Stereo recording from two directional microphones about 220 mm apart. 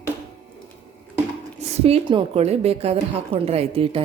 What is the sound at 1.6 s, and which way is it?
A woman's voice, 25° right (ahead or behind).